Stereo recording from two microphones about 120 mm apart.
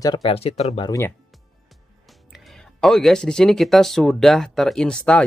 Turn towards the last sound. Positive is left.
turn(degrees=5)  # may be behind; listen again after turning